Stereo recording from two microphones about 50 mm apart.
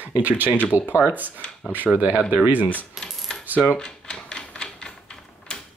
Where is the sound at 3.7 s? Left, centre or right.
Centre.